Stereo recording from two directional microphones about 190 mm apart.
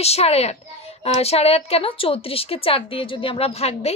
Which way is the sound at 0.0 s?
35° left (ahead or behind).